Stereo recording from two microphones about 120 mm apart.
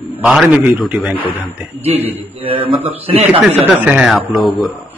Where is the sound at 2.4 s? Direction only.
50° right (ahead or behind).